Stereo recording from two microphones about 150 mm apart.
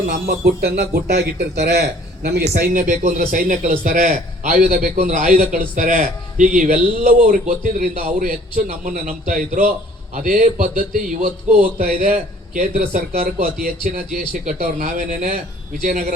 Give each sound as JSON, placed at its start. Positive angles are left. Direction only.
{"t": 0.3, "sound": "speech", "side_deg": -90}
{"t": 2.6, "sound": "a man's voice", "side_deg": -65}
{"t": 5.0, "sound": "a man's voice", "side_deg": -60}